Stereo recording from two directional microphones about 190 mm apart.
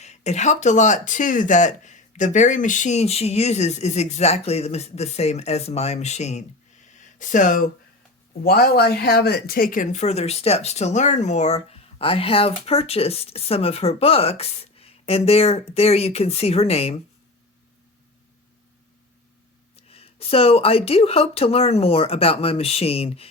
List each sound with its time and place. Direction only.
0.0 s speech: 35° left (ahead or behind)
8.4 s speech: 55° left (ahead or behind); by 17.0 s 30° left (ahead or behind)
19.7 s speech: 30° left (ahead or behind)